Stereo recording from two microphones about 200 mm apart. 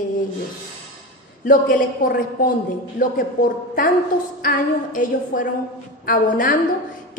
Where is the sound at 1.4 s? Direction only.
45° left (ahead or behind).